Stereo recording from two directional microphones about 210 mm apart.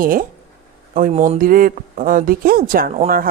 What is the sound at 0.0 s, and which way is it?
Speech, 40° right (ahead or behind).